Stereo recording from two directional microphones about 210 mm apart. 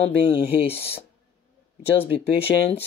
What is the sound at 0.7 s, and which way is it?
Speech, 10° left (ahead or behind).